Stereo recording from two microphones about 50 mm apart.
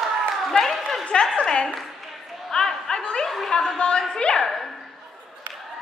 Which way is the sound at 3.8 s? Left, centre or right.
Centre.